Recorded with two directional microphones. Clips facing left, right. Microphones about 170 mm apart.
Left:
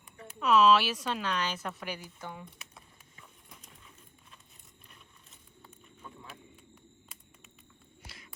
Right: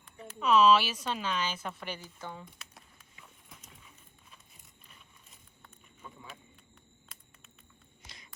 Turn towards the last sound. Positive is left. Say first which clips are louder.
# left 1 dB
turn(degrees=0)  # may be behind; listen again after turning